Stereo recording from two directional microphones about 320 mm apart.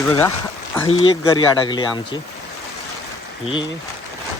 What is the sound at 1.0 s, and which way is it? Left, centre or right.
Speech, centre.